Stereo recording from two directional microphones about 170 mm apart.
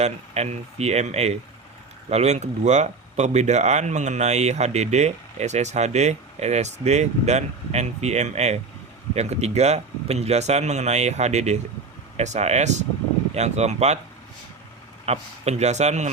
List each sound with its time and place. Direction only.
0.0 s speech: 40° right (ahead or behind)
15.0 s speech: 40° right (ahead or behind)